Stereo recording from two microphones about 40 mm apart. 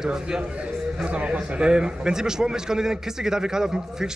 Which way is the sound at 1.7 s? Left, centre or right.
Centre.